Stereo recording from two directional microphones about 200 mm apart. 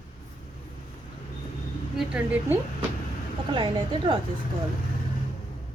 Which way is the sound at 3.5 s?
25° right (ahead or behind).